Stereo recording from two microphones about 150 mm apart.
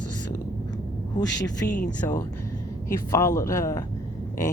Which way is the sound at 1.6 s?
15° left (ahead or behind).